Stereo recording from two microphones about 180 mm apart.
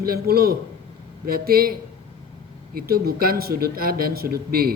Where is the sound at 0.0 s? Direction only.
55° right (ahead or behind).